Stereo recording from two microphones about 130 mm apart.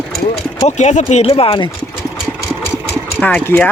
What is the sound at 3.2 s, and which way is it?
Speech, 10° left (ahead or behind).